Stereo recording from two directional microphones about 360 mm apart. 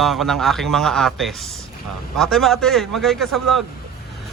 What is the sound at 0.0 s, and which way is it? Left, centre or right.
Speech, centre.